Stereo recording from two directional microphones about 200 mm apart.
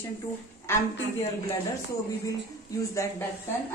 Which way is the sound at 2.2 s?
15° left (ahead or behind).